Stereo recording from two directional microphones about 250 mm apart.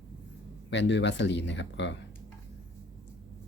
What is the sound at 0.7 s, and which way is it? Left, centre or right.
Speech, left.